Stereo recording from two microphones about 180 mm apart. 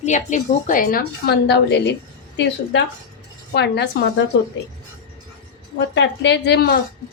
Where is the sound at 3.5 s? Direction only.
70° left (ahead or behind).